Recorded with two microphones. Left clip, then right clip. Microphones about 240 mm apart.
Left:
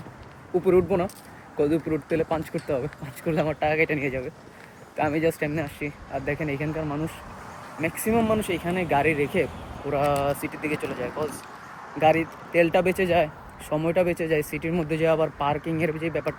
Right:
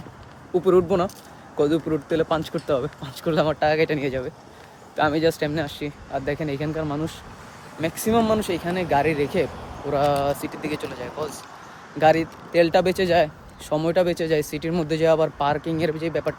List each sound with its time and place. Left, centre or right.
0.5 s speech: centre